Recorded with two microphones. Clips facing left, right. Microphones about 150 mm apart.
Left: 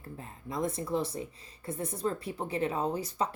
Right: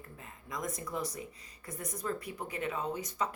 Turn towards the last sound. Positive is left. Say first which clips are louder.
# left 4 dB
turn(degrees=30)  # may be behind; listen again after turning